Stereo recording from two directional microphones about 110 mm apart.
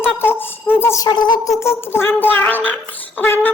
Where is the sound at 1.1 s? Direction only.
40° left (ahead or behind).